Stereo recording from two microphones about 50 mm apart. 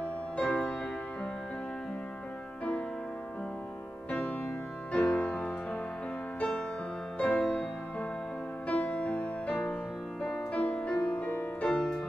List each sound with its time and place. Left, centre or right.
0.0 s music: left
4.9 s music: left
7.2 s music: left
8.6 s music: left
10.3 s music: left